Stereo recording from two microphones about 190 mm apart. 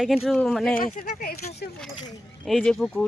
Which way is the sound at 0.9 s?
55° left (ahead or behind).